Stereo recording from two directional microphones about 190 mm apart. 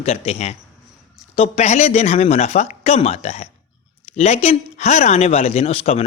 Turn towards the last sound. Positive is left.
turn(degrees=30)  # may be behind; listen again after turning